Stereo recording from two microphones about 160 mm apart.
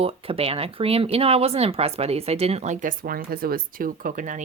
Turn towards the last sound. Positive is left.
turn(degrees=-55)  # may be behind; listen again after turning